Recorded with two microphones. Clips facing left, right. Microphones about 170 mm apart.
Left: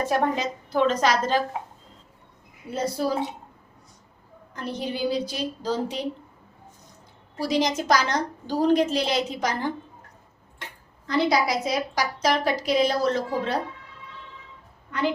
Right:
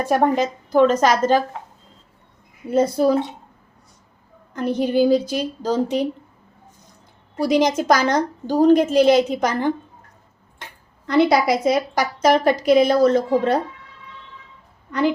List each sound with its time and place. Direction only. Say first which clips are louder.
0.0 s a woman's voice: right 6 dB; 50° right (ahead or behind)
2.7 s a woman's voice: right 9 dB; 50° right (ahead or behind)
4.5 s a woman's voice: right 11 dB; 50° right (ahead or behind)
7.3 s a woman's voice: right 6 dB; 55° right (ahead or behind)
11.0 s a woman's voice: right 6 dB; 65° right (ahead or behind)